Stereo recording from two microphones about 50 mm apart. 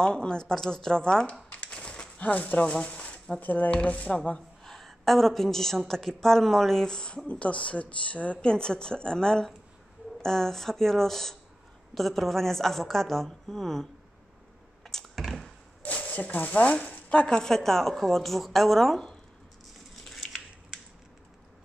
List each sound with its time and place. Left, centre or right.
0.0 s a woman's voice: centre
1.5 s a sound: left
3.3 s speech: left
4.6 s a woman's voice: centre; by 8.5 s left
8.5 s a woman's voice: centre
14.8 s computer keyboard: centre
15.8 s a woman's voice: left; by 19.0 s centre
20.1 s a sound: centre